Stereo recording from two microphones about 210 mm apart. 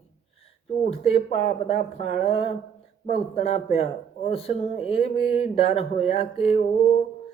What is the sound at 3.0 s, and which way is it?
Speech, 30° left (ahead or behind).